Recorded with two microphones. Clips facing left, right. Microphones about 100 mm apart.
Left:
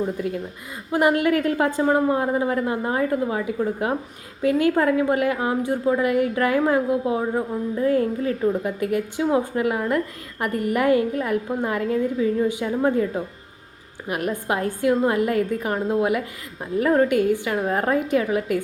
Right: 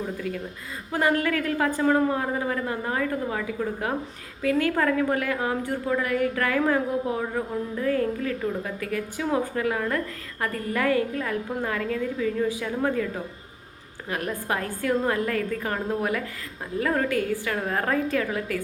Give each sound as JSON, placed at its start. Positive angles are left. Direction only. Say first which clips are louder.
{"t": 0.9, "sound": "a woman's voice", "louder": "left 5 dB", "side_deg": 20}
{"t": 14.3, "sound": "a woman's voice", "louder": "left 5 dB", "side_deg": 20}